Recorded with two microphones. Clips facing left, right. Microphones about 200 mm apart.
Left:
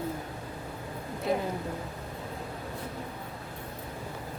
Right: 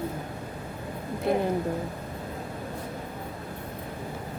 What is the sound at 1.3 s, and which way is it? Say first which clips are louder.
Speech: right 4 dB; 55° right (ahead or behind).